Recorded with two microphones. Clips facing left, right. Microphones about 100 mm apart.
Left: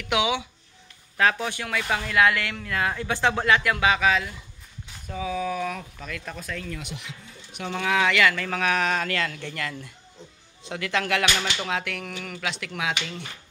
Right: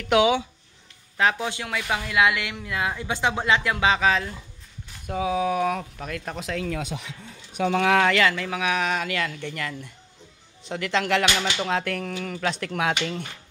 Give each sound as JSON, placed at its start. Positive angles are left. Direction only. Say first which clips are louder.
{"t": 0.0, "sound": "speech", "louder": "right 5 dB", "side_deg": -40}
{"t": 1.1, "sound": "speech", "louder": "even", "side_deg": -20}
{"t": 5.0, "sound": "speech", "louder": "right 4 dB", "side_deg": -55}
{"t": 6.3, "sound": "speech", "louder": "right 5 dB", "side_deg": -70}
{"t": 7.7, "sound": "speech", "louder": "right 4 dB", "side_deg": -65}
{"t": 8.0, "sound": "speech", "louder": "right 1 dB", "side_deg": -35}
{"t": 8.4, "sound": "speech", "louder": "even", "side_deg": -10}
{"t": 11.3, "sound": "speech", "louder": "right 2 dB", "side_deg": -5}
{"t": 11.7, "sound": "speech", "louder": "right 4 dB", "side_deg": -35}
{"t": 12.4, "sound": "speech", "louder": "right 4 dB", "side_deg": -45}